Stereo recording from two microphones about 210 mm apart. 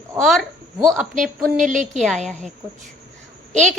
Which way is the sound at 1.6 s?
35° right (ahead or behind).